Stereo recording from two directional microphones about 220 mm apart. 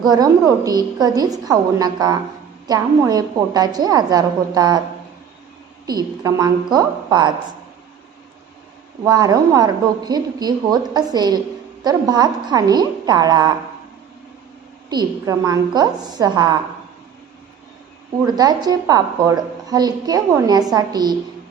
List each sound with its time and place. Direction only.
0.0 s a woman's voice: 15° right (ahead or behind)
5.8 s a woman's voice: 15° right (ahead or behind)
9.0 s a woman's voice: 15° right (ahead or behind)
14.8 s a woman's voice: 20° right (ahead or behind)
18.3 s a woman's voice: 15° right (ahead or behind)